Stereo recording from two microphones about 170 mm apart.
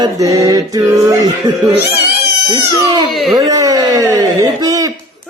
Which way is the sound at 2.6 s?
25° right (ahead or behind).